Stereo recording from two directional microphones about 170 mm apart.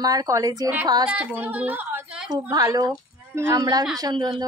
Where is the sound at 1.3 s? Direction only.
10° right (ahead or behind).